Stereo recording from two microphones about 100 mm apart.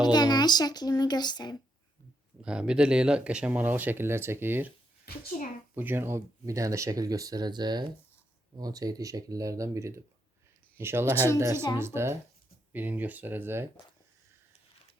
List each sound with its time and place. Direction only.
0.0 s a child's voice: 45° left (ahead or behind)
2.4 s speech: 10° right (ahead or behind)
5.7 s speech: 20° right (ahead or behind)